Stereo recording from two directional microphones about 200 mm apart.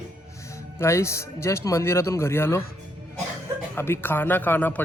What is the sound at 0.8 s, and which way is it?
Speech, 15° left (ahead or behind).